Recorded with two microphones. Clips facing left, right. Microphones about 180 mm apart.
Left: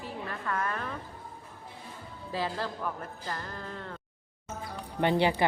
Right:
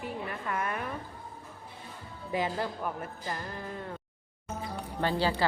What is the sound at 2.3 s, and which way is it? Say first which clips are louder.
Speech: right 2 dB; 15° right (ahead or behind).